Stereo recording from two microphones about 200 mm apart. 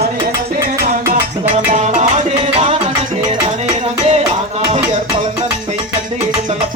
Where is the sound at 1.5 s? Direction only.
35° right (ahead or behind).